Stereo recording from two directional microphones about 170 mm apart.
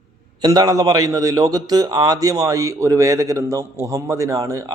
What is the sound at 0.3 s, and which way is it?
A man's voice, 25° right (ahead or behind).